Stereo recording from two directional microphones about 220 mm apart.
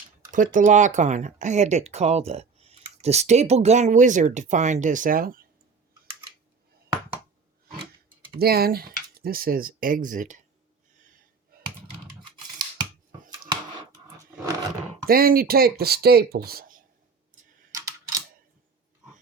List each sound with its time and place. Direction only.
0.3 s speech: 35° right (ahead or behind)
8.4 s speech: 45° right (ahead or behind)
12.2 s scissors: 20° right (ahead or behind)
13.5 s a sound: 20° right (ahead or behind)
15.0 s speech: 40° right (ahead or behind)
17.7 s typing: 15° right (ahead or behind)